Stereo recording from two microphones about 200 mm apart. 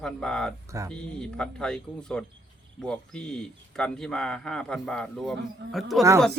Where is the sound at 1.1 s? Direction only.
5° left (ahead or behind).